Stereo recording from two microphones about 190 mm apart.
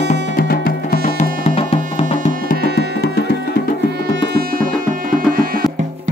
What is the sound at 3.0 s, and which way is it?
Music, 55° left (ahead or behind).